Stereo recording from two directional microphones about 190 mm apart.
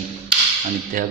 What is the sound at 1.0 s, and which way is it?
Speech, 45° right (ahead or behind).